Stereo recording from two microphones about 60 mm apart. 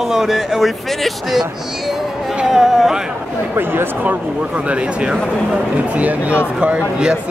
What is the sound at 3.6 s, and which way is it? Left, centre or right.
Speech, right.